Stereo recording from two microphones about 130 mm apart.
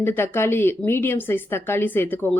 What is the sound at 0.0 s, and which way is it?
A woman's voice, 20° left (ahead or behind).